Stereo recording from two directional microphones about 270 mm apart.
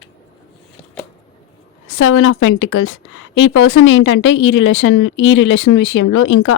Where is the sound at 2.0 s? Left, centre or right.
Left.